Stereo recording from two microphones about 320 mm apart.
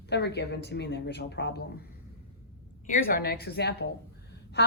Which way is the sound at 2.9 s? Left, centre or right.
Left.